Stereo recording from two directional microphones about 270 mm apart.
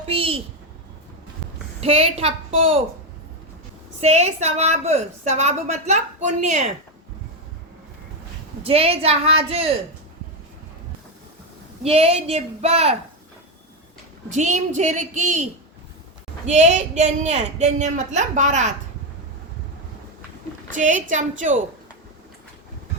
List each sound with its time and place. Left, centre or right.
0.1 s a sound: right
1.8 s a woman's voice: right
4.0 s a woman's voice: right
8.6 s a woman's voice: right
11.8 s a woman's voice: right
14.3 s a woman's voice: right
16.5 s a woman's voice: right
20.7 s a woman's voice: right